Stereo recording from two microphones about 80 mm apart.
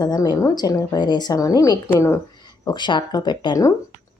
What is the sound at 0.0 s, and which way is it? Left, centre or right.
A woman's voice, left.